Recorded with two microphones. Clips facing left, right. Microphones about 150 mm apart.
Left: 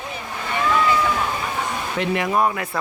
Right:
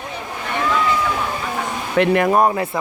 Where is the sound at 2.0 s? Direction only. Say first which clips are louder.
Right 6 dB; 55° right (ahead or behind).